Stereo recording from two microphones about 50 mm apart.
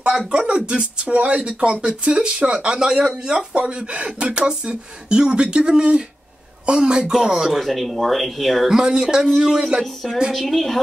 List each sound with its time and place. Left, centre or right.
0.3 s speech: right
7.6 s speech: centre
8.7 s speech: centre
10.3 s speech: centre